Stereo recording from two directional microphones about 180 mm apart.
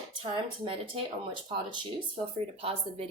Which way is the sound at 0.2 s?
30° right (ahead or behind).